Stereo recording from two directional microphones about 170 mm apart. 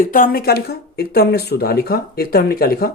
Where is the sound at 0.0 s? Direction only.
55° left (ahead or behind).